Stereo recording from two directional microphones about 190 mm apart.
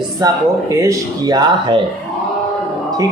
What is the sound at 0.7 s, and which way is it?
Speech, 15° right (ahead or behind).